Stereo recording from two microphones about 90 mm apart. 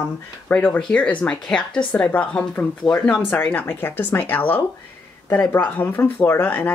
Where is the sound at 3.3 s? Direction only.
20° left (ahead or behind).